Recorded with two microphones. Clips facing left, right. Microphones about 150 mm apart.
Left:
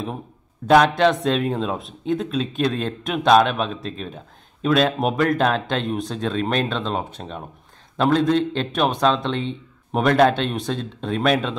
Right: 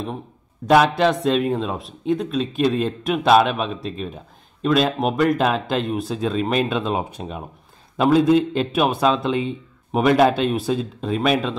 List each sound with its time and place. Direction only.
0.7 s speech: centre (ahead or behind)